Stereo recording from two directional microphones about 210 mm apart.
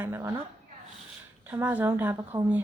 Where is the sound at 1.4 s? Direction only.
5° right (ahead or behind).